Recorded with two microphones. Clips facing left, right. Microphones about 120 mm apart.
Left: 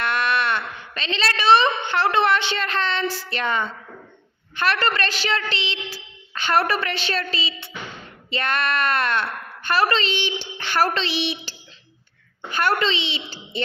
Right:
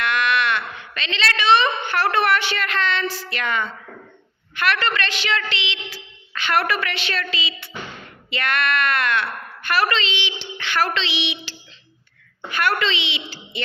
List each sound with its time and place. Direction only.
0.0 s a woman's voice: 35° left (ahead or behind)
12.5 s a woman's voice: 30° left (ahead or behind)